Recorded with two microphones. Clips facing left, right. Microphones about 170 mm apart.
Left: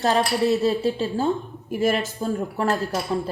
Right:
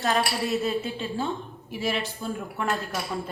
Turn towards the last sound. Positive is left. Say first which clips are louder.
# left 6 dB
turn(degrees=35)  # may be behind; listen again after turning